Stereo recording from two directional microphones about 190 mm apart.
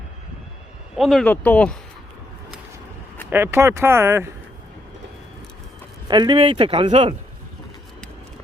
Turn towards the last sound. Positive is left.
turn(degrees=-25)  # may be behind; listen again after turning